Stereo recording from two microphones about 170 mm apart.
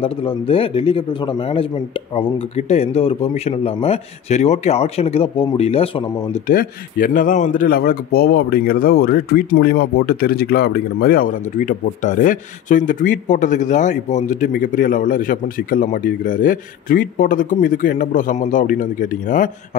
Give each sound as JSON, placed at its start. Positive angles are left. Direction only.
{"t": 0.0, "sound": "speech", "side_deg": 30}
{"t": 6.4, "sound": "speech", "side_deg": 60}
{"t": 7.6, "sound": "speech", "side_deg": 65}